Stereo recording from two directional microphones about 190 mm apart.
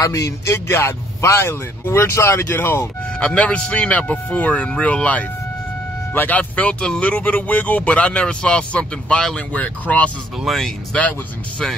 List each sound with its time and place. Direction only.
0.0 s a man's voice: 15° left (ahead or behind)